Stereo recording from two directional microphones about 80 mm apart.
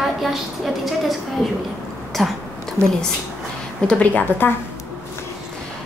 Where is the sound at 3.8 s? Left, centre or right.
Centre.